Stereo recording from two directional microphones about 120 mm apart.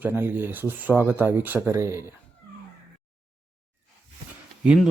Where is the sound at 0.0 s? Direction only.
15° right (ahead or behind).